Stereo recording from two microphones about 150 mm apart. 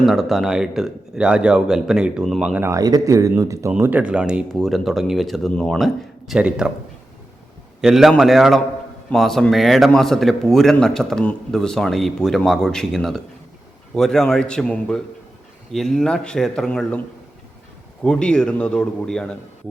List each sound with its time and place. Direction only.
0.0 s a man's voice: centre (ahead or behind)
2.6 s a man's voice: 25° right (ahead or behind); by 6.7 s 5° right (ahead or behind)
7.8 s a man's voice: centre (ahead or behind)
18.0 s a man's voice: 5° left (ahead or behind)